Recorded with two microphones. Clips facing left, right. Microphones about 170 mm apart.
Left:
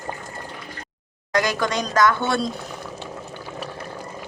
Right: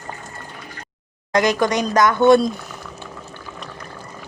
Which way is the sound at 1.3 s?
20° right (ahead or behind).